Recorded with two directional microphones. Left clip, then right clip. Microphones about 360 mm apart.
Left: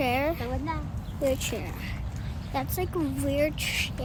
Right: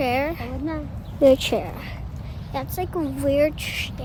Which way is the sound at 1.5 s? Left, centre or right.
Right.